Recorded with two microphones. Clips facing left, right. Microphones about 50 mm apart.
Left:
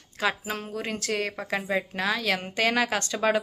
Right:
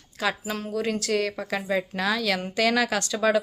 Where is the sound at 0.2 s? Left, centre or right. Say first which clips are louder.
Even; left.